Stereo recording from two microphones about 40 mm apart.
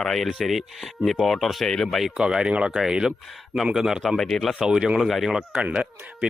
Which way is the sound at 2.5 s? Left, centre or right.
Right.